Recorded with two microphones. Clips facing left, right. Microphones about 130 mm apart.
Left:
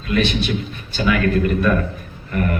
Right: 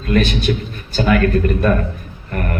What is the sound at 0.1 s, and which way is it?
A man's voice, 45° right (ahead or behind).